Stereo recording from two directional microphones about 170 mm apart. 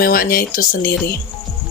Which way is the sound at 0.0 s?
60° left (ahead or behind).